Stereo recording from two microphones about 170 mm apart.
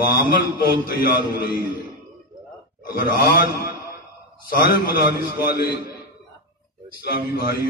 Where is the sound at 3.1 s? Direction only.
65° left (ahead or behind).